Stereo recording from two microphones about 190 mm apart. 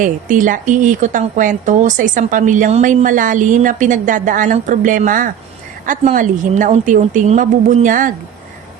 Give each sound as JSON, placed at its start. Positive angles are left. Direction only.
{"t": 0.0, "sound": "speech", "side_deg": -45}